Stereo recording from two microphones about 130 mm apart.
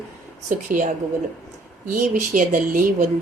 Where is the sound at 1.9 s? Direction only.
90° right.